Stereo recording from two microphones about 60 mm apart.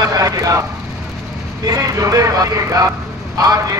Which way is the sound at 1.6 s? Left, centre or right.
Right.